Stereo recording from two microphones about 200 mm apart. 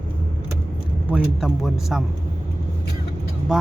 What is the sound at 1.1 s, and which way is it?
Speech, 5° right (ahead or behind).